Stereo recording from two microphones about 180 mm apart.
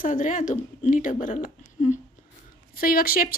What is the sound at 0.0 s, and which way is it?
A woman's voice, 45° left (ahead or behind).